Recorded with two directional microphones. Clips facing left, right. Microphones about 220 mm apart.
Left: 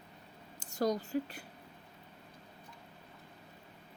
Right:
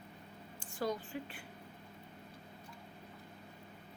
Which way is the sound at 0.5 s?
40° left (ahead or behind).